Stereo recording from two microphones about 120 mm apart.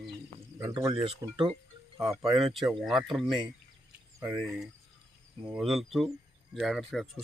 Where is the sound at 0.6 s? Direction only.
30° right (ahead or behind).